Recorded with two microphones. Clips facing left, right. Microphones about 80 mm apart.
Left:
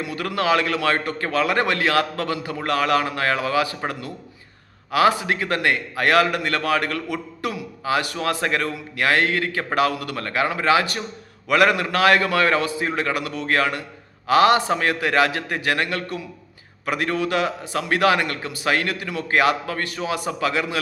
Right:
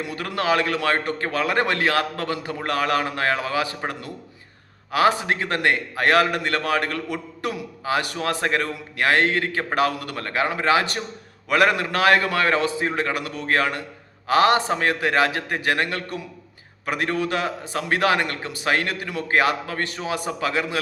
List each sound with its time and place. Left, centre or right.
0.1 s a man's voice: right
4.9 s a man's voice: right